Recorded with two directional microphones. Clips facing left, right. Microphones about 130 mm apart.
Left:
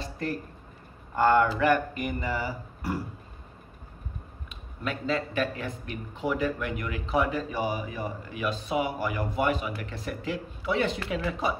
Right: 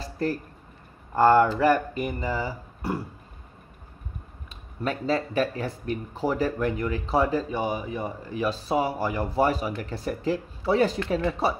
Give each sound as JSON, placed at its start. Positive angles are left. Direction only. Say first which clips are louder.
{"t": 0.0, "sound": "a sound", "louder": "right 4 dB", "side_deg": -35}
{"t": 1.1, "sound": "speech", "louder": "right 4 dB", "side_deg": -35}
{"t": 4.5, "sound": "speech", "louder": "right 4 dB", "side_deg": -35}